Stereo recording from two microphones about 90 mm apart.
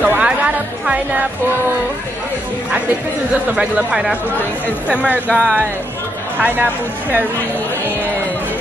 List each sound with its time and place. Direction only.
0.0 s music: 15° right (ahead or behind)
0.8 s speech: 15° right (ahead or behind)
3.5 s speech: 10° right (ahead or behind)
5.3 s speech: 10° left (ahead or behind)
6.4 s speech: 20° right (ahead or behind)